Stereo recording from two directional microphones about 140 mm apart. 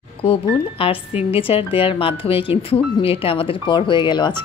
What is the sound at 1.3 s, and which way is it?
Speech, 40° left (ahead or behind).